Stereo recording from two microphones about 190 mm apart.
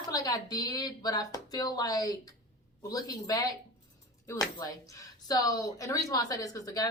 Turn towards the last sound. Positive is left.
turn(degrees=20)  # may be behind; listen again after turning